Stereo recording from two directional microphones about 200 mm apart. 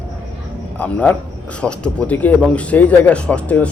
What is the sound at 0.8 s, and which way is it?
Speech, 5° left (ahead or behind).